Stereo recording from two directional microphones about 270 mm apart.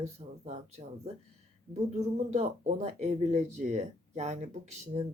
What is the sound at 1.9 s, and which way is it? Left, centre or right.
Speech, right.